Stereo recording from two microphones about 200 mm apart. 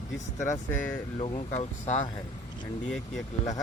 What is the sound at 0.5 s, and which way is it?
Speech, 10° left (ahead or behind).